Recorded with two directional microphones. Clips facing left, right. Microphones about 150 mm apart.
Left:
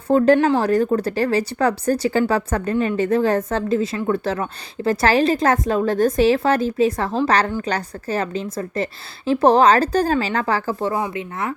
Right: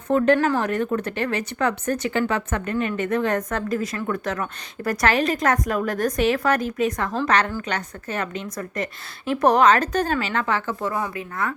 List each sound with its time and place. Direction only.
0.3 s speech: 20° left (ahead or behind)
0.6 s speech: 35° left (ahead or behind)